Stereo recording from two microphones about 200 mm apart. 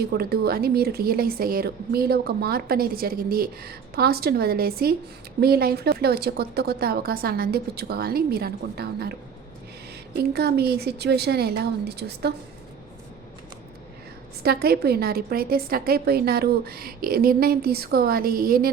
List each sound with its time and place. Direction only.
0.0 s speech: 50° right (ahead or behind)
10.2 s speech: 55° right (ahead or behind)
14.4 s speech: 50° right (ahead or behind)